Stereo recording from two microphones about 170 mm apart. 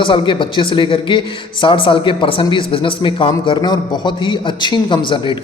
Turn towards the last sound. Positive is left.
turn(degrees=30)  # may be behind; listen again after turning